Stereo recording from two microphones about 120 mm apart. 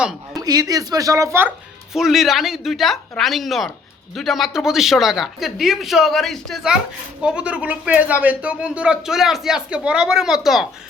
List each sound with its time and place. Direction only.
0.3 s speech: 30° right (ahead or behind)
1.9 s a woman's voice: 5° right (ahead or behind)